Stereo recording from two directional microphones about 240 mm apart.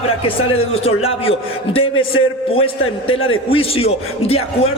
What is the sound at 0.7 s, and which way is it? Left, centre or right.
Speech, left.